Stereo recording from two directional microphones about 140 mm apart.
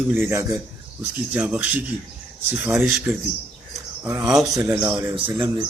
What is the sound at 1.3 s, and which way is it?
Speech, 5° right (ahead or behind).